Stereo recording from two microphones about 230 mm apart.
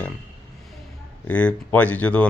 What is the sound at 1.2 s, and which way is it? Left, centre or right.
Speech, centre.